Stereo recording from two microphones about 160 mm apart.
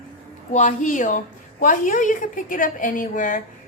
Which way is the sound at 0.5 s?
50° left (ahead or behind).